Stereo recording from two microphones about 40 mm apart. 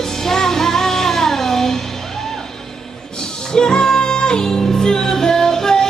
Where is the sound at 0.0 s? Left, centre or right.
Centre.